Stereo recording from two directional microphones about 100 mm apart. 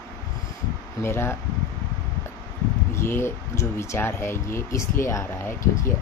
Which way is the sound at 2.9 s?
25° left (ahead or behind).